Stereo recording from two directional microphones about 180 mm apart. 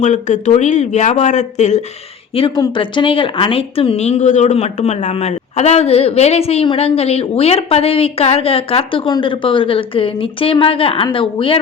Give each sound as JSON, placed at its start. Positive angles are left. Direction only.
{"t": 0.0, "sound": "speech", "side_deg": 40}
{"t": 2.3, "sound": "speech", "side_deg": 30}